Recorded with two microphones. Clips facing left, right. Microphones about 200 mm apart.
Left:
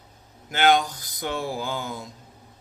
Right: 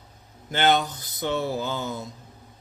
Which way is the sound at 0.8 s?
25° right (ahead or behind).